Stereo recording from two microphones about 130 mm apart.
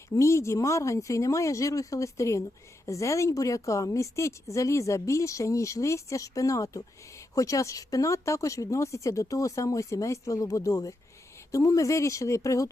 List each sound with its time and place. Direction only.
0.2 s a woman's voice: 20° left (ahead or behind)